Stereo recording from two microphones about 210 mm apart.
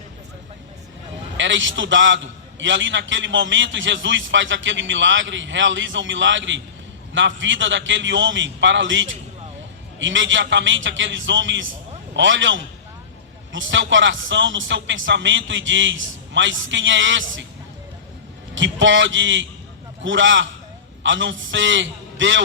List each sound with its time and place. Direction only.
1.4 s a man's voice: 60° right (ahead or behind)
18.5 s a man's voice: 60° right (ahead or behind)